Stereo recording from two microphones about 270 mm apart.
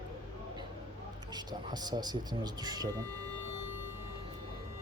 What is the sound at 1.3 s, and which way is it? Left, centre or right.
Speech, centre.